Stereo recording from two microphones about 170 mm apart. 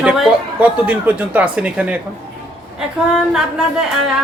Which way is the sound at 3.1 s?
5° right (ahead or behind).